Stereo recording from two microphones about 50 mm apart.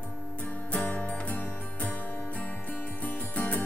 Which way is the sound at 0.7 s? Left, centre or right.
Left.